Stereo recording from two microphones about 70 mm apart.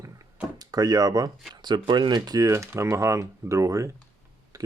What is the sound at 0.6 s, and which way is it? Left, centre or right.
Speech, right.